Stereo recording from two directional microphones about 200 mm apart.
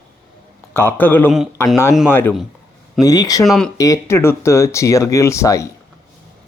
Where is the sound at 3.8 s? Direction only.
15° left (ahead or behind).